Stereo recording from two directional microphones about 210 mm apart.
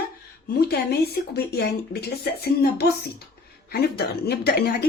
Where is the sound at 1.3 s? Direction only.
50° left (ahead or behind).